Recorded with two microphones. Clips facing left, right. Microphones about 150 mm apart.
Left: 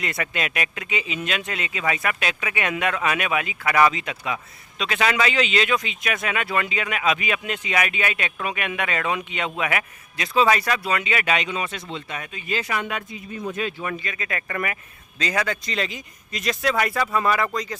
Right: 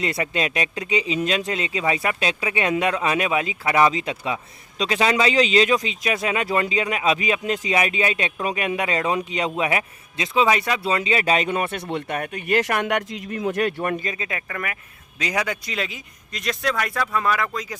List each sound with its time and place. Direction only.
0.0 s speech: 30° right (ahead or behind)
11.4 s speech: 55° right (ahead or behind)
14.1 s speech: 20° right (ahead or behind)
14.4 s speech: centre (ahead or behind)
15.2 s speech: 15° right (ahead or behind)